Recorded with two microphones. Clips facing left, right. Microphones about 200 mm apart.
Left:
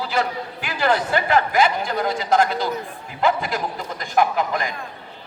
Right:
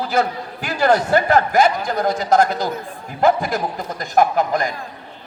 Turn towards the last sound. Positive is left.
turn(degrees=-40)  # may be behind; listen again after turning